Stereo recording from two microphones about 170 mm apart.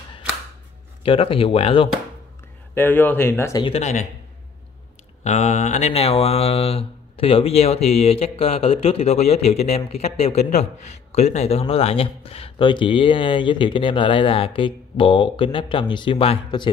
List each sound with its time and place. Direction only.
1.0 s speech: 30° left (ahead or behind)
2.7 s speech: 10° left (ahead or behind)
3.6 s speech: 40° left (ahead or behind)
5.2 s speech: 40° left (ahead or behind)